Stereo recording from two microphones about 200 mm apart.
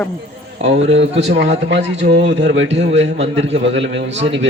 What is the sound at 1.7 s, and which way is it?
A man's voice, 60° right (ahead or behind).